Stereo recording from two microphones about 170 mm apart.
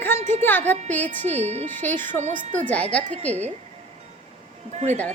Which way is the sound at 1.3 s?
40° right (ahead or behind).